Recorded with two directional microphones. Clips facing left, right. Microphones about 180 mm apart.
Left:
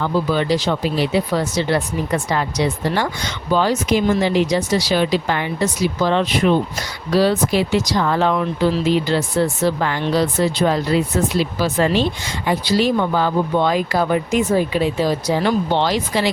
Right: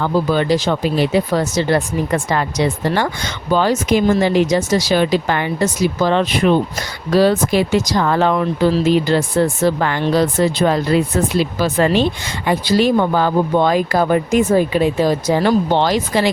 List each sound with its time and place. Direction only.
0.0 s speech: 50° right (ahead or behind)